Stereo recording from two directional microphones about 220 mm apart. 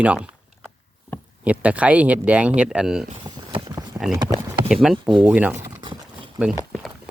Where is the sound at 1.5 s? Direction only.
5° right (ahead or behind).